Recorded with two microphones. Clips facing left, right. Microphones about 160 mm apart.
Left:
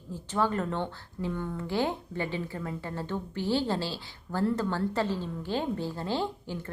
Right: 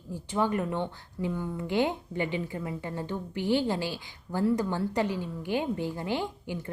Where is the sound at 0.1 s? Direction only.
15° right (ahead or behind).